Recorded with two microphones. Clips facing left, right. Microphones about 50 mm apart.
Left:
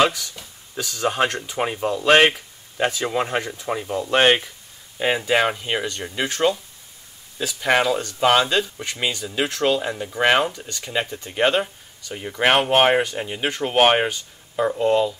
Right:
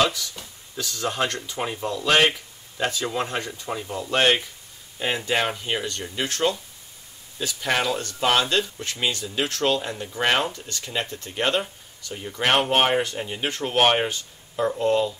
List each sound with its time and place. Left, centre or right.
0.7 s speech: centre
1.1 s speech: left
4.9 s speech: centre
7.6 s speech: centre
12.4 s speech: centre